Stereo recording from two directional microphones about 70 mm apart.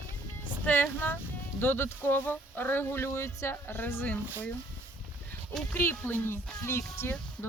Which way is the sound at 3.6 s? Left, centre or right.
Left.